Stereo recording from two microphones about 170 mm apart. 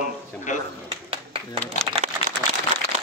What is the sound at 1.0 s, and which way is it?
Clapping, 35° right (ahead or behind).